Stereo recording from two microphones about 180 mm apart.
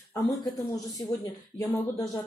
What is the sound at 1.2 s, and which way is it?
Speech, 15° left (ahead or behind).